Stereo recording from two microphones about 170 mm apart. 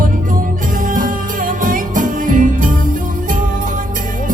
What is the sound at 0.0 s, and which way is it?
Music, 50° right (ahead or behind).